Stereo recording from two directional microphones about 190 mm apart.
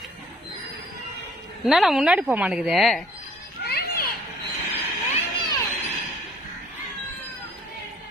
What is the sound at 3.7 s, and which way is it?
Children playing, 55° left (ahead or behind).